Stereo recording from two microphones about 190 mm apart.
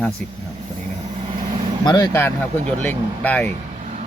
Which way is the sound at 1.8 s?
20° left (ahead or behind).